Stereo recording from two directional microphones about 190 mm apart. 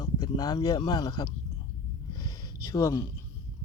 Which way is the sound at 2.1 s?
20° left (ahead or behind).